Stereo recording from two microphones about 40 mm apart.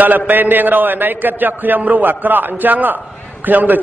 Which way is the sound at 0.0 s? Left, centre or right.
Right.